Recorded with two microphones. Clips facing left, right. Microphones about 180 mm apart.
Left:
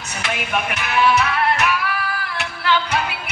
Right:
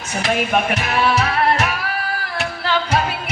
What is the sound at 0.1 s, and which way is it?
Music, 40° right (ahead or behind).